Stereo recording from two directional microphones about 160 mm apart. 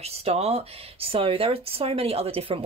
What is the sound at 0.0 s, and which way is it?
Speech, 40° right (ahead or behind).